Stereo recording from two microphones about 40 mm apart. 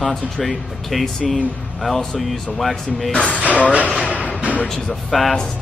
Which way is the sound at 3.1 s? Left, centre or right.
Left.